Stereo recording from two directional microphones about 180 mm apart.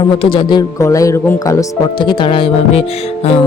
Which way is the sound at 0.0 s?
30° left (ahead or behind).